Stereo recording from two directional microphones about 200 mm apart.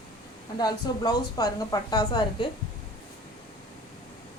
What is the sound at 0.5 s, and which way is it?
A woman's voice, 20° left (ahead or behind).